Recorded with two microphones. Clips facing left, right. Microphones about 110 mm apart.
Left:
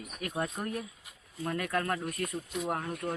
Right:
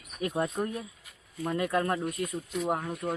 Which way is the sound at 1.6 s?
20° right (ahead or behind).